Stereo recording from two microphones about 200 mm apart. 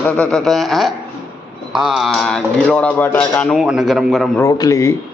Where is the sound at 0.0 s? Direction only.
5° left (ahead or behind).